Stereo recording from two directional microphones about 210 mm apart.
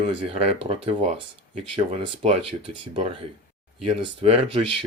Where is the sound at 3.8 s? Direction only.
30° right (ahead or behind).